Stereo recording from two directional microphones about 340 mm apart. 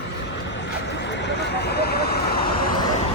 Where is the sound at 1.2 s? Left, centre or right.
Left.